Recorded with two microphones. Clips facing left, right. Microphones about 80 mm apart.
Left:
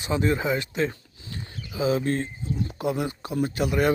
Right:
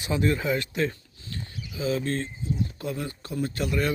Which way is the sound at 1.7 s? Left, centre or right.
Centre.